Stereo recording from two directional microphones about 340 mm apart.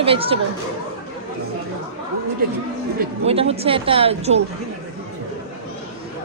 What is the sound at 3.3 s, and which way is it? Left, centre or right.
A woman's voice, centre.